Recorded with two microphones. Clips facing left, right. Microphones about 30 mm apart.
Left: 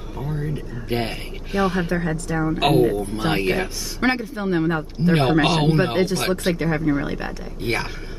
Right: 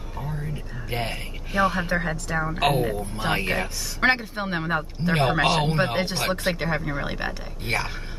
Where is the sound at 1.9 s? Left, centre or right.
Right.